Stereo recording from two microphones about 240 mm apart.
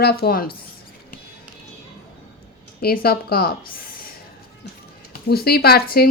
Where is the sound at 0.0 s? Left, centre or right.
Left.